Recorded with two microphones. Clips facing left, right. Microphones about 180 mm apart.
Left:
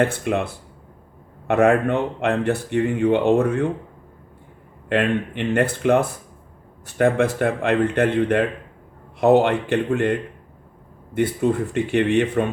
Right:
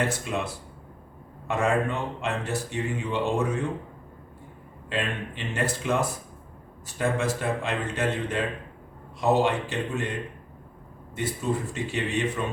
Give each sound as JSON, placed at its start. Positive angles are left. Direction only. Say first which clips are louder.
{"t": 0.0, "sound": "speech", "louder": "left 7 dB", "side_deg": 55}
{"t": 4.9, "sound": "speech", "louder": "left 10 dB", "side_deg": 60}